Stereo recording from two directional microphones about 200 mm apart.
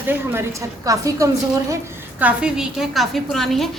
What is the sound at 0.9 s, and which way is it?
Speech, 15° right (ahead or behind).